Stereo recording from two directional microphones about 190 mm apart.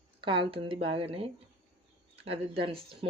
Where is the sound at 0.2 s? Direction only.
25° right (ahead or behind).